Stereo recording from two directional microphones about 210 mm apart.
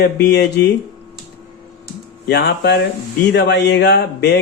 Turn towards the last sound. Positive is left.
turn(degrees=55)  # may be behind; listen again after turning